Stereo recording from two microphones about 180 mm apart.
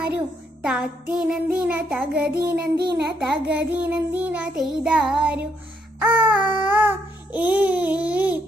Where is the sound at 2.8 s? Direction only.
65° right (ahead or behind).